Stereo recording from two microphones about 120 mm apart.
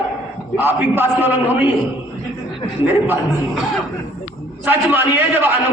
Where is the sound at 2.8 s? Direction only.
15° right (ahead or behind).